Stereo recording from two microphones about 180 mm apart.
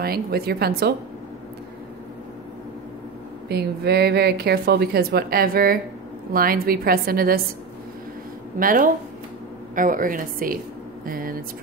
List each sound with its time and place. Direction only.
0.0 s a woman's voice: 60° right (ahead or behind)
3.4 s a woman's voice: 65° right (ahead or behind)
8.5 s a woman's voice: 50° right (ahead or behind)